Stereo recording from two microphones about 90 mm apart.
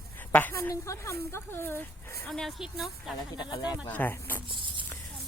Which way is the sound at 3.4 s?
50° left (ahead or behind).